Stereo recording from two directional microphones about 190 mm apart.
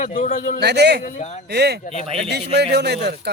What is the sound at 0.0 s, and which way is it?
Speech, 45° left (ahead or behind).